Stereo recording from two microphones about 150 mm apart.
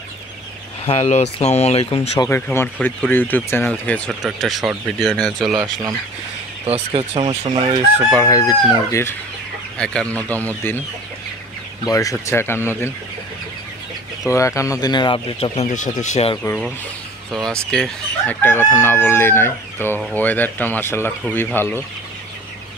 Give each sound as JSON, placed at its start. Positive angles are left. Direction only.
{"t": 0.8, "sound": "speech", "side_deg": 45}
{"t": 2.2, "sound": "speech", "side_deg": 15}
{"t": 6.6, "sound": "speech", "side_deg": -40}
{"t": 8.3, "sound": "speech", "side_deg": 20}
{"t": 9.8, "sound": "speech", "side_deg": 5}
{"t": 11.8, "sound": "speech", "side_deg": 25}
{"t": 14.2, "sound": "speech", "side_deg": 20}
{"t": 17.3, "sound": "speech", "side_deg": 5}